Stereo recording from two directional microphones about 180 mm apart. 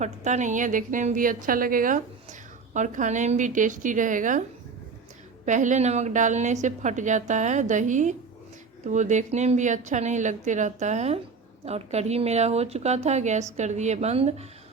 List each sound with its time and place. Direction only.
0.0 s a woman's voice: 40° right (ahead or behind)
5.5 s a woman's voice: 45° right (ahead or behind)